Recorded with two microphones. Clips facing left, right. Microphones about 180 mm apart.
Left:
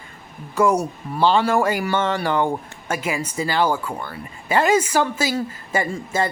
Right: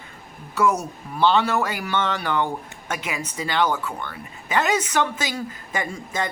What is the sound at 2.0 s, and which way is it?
Speech, 50° left (ahead or behind).